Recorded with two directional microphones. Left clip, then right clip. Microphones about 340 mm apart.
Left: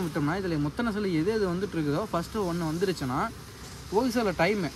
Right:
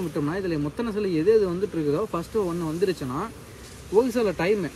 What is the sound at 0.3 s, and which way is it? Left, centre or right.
Speech, centre.